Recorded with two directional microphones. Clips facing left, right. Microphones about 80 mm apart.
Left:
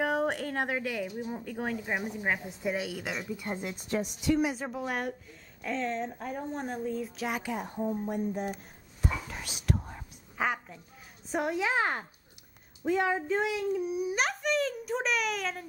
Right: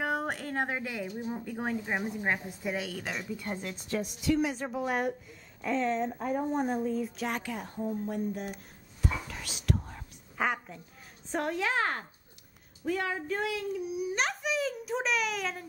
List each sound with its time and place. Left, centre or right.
0.3 s speech: centre
2.0 s a woman's voice: centre; by 4.5 s left
4.5 s speech: centre
7.4 s speech: centre
9.0 s whispering: left
10.3 s a sound: centre
11.2 s a woman's voice: centre
13.7 s speech: left
14.1 s a child's voice: centre